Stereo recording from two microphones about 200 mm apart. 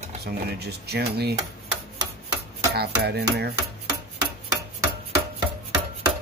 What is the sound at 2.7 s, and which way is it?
Speech, 55° right (ahead or behind).